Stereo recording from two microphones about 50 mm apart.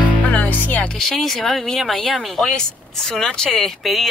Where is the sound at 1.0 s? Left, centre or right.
Centre.